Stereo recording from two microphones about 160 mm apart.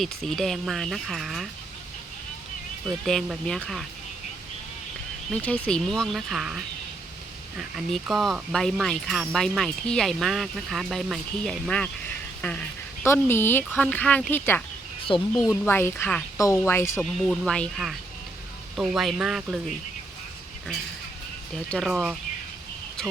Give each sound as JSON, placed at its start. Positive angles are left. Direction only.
{"t": 0.0, "sound": "speech", "side_deg": 0}
{"t": 2.8, "sound": "speech", "side_deg": 0}
{"t": 5.3, "sound": "speech", "side_deg": 5}
{"t": 7.8, "sound": "speech", "side_deg": 0}
{"t": 15.1, "sound": "speech", "side_deg": 30}
{"t": 15.4, "sound": "speech", "side_deg": 15}
{"t": 17.0, "sound": "speech", "side_deg": 0}
{"t": 21.5, "sound": "speech", "side_deg": 5}